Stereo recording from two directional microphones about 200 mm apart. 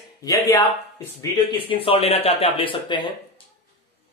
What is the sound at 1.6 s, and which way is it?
Speech, 25° left (ahead or behind).